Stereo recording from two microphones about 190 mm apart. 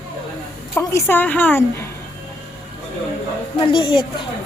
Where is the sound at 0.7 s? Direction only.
10° left (ahead or behind).